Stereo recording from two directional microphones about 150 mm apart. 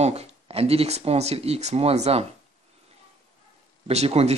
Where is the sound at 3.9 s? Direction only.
45° right (ahead or behind).